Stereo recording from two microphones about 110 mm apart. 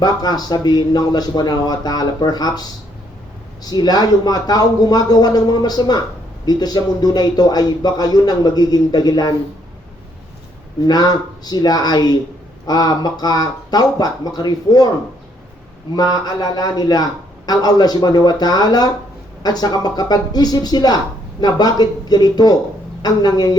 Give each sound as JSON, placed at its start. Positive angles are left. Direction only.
{"t": 0.0, "sound": "speech", "side_deg": 35}
{"t": 10.8, "sound": "speech", "side_deg": 40}
{"t": 16.2, "sound": "speech", "side_deg": 35}